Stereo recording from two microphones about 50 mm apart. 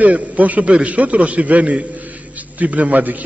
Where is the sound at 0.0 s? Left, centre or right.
Right.